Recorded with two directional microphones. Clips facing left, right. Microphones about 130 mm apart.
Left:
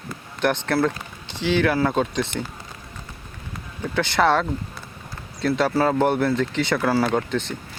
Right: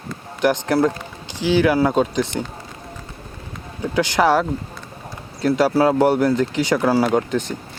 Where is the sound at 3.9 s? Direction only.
10° right (ahead or behind).